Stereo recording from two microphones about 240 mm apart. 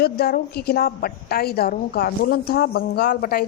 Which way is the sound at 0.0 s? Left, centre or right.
Left.